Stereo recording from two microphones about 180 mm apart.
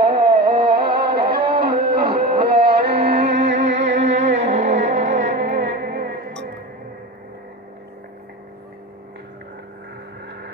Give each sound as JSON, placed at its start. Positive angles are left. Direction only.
{"t": 0.2, "sound": "music", "side_deg": -60}
{"t": 1.6, "sound": "a sound", "side_deg": -60}
{"t": 2.9, "sound": "music", "side_deg": -35}
{"t": 3.6, "sound": "music", "side_deg": -90}
{"t": 4.0, "sound": "music", "side_deg": -40}